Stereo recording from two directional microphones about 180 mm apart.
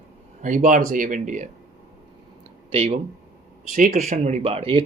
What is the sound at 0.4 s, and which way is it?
Speech, 50° right (ahead or behind).